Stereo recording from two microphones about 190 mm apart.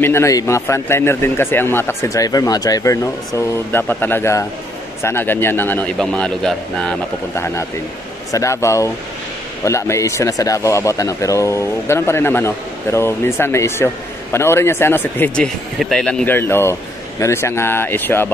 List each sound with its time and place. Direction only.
0.0 s speech: 15° left (ahead or behind)